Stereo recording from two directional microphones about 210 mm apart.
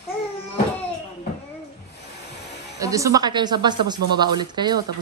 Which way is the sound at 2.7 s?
15° right (ahead or behind).